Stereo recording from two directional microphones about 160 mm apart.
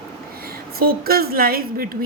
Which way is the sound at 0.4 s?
70° right (ahead or behind).